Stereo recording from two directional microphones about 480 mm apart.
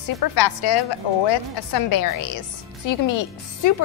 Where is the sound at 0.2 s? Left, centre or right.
Left.